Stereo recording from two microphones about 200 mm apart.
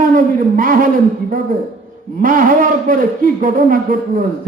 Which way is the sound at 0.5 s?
45° right (ahead or behind).